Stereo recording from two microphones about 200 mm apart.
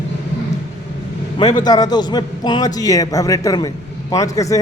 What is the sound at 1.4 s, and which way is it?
A man's voice, 20° left (ahead or behind).